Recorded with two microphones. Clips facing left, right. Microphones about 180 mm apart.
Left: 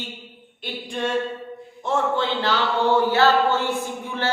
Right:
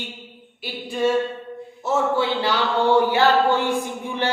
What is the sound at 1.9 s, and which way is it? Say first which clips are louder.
Speech: right 2 dB; 10° right (ahead or behind).